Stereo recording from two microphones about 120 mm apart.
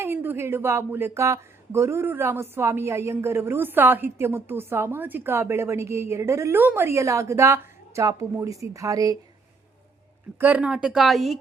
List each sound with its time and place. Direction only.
0.0 s speech: 15° right (ahead or behind)
10.3 s speech: 15° right (ahead or behind)